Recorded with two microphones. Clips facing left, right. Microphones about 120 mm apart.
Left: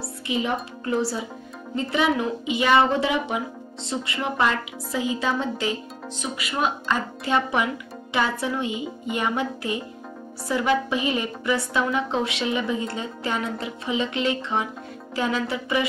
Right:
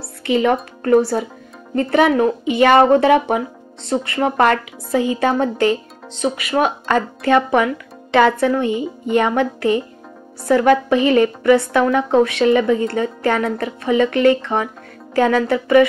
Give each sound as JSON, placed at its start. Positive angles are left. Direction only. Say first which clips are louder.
{"t": 0.2, "sound": "a woman's voice", "louder": "right 10 dB", "side_deg": -60}
{"t": 8.6, "sound": "speech", "louder": "right 8 dB", "side_deg": 10}
{"t": 9.1, "sound": "a woman's voice", "louder": "right 9 dB", "side_deg": -60}